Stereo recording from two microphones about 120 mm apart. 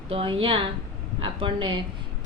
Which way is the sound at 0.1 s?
50° right (ahead or behind).